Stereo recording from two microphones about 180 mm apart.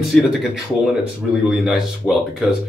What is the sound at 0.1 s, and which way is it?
Speech, 5° left (ahead or behind).